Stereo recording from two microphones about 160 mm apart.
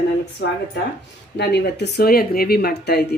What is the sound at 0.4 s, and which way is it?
Speech, 90° left.